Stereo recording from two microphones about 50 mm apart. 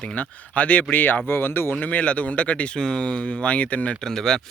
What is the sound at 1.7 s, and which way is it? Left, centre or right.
Speech, left.